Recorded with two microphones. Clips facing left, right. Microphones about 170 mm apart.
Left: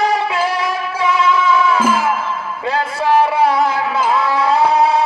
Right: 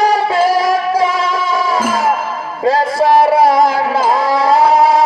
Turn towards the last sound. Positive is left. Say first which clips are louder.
# right 3 dB
turn(degrees=-35)  # may be behind; listen again after turning